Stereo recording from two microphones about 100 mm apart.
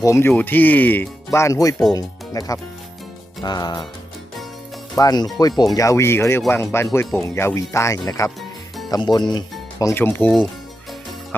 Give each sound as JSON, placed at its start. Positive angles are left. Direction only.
{"t": 0.0, "sound": "speech", "side_deg": 25}
{"t": 4.9, "sound": "speech", "side_deg": 40}
{"t": 8.4, "sound": "music", "side_deg": 0}
{"t": 8.9, "sound": "speech", "side_deg": 45}
{"t": 9.9, "sound": "speech", "side_deg": 20}